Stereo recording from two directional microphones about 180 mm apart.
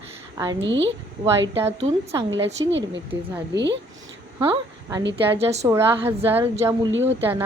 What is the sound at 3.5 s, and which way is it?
Speech, 75° right (ahead or behind).